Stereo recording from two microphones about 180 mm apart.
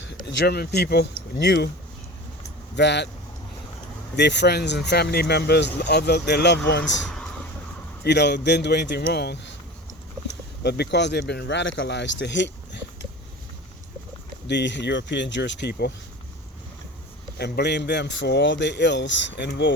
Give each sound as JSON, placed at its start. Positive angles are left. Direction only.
{"t": 0.3, "sound": "speech", "side_deg": 70}
{"t": 2.7, "sound": "speech", "side_deg": 70}
{"t": 4.2, "sound": "speech", "side_deg": 75}
{"t": 8.0, "sound": "speech", "side_deg": 70}
{"t": 10.6, "sound": "speech", "side_deg": 65}
{"t": 14.4, "sound": "speech", "side_deg": 75}
{"t": 17.3, "sound": "speech", "side_deg": 65}